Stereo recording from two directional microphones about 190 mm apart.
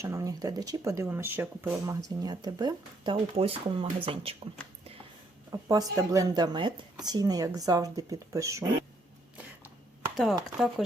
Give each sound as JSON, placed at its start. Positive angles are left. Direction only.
{"t": 0.0, "sound": "speech", "side_deg": -15}
{"t": 5.5, "sound": "speech", "side_deg": -20}
{"t": 10.8, "sound": "speech", "side_deg": -5}